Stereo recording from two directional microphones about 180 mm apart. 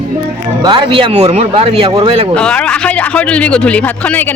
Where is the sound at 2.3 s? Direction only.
5° left (ahead or behind).